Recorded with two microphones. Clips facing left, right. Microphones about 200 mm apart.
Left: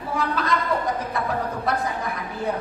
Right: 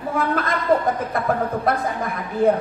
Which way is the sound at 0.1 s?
50° right (ahead or behind).